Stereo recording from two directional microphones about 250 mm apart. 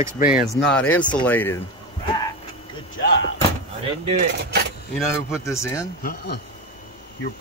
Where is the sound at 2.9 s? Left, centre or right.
Left.